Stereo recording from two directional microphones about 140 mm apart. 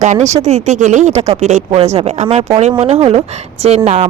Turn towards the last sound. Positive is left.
turn(degrees=-50)  # may be behind; listen again after turning